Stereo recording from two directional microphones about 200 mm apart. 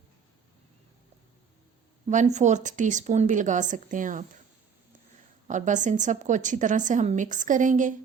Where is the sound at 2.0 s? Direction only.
35° right (ahead or behind).